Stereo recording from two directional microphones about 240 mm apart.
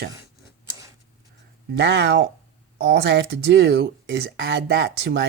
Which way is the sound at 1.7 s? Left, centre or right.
Right.